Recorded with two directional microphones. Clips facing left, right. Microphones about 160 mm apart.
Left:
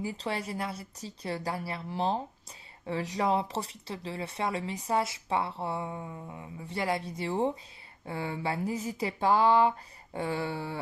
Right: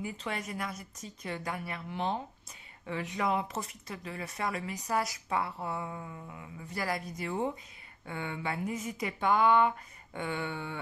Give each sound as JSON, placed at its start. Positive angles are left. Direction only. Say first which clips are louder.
{"t": 0.0, "sound": "speech", "louder": "left 3 dB", "side_deg": 30}